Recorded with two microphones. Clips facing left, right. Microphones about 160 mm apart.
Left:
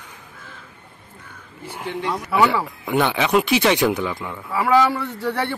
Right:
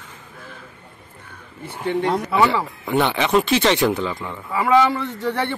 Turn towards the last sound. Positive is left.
turn(degrees=5)  # may be behind; listen again after turning